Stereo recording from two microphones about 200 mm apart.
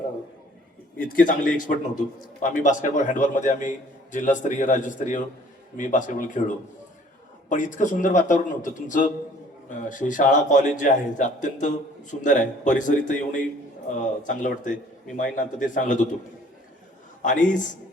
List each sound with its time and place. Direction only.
0.9 s a man's voice: 45° left (ahead or behind)
7.5 s a man's voice: 40° left (ahead or behind)
17.2 s a man's voice: 40° left (ahead or behind)